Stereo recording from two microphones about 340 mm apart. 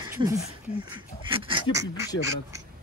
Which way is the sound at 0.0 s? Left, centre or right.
Centre.